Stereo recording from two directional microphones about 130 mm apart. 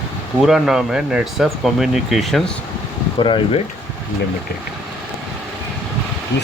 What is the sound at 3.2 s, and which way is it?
Speech, 40° left (ahead or behind).